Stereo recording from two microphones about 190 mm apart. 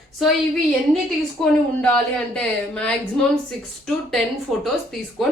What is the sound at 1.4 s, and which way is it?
A woman's voice, 5° left (ahead or behind).